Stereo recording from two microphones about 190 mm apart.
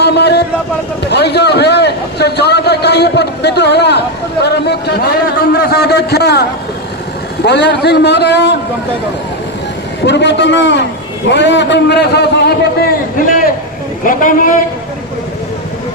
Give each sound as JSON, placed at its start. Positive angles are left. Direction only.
{"t": 0.0, "sound": "a sound", "side_deg": 60}
{"t": 1.1, "sound": "a man's voice", "side_deg": 60}
{"t": 7.4, "sound": "a man's voice", "side_deg": 65}
{"t": 10.1, "sound": "a man's voice", "side_deg": 65}
{"t": 14.0, "sound": "a man's voice", "side_deg": 45}